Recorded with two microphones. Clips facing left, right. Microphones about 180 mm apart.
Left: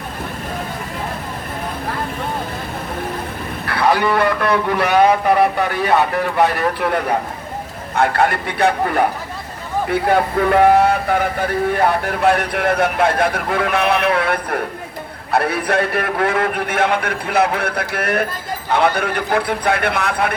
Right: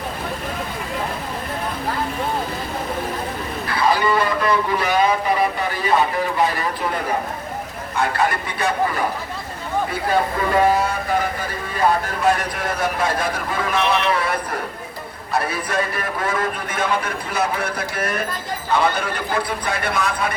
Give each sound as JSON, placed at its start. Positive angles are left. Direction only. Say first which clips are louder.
{"t": 3.7, "sound": "speech", "louder": "left 3 dB", "side_deg": 60}